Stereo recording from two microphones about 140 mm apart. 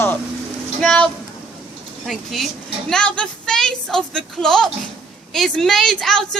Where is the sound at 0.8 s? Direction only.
5° left (ahead or behind).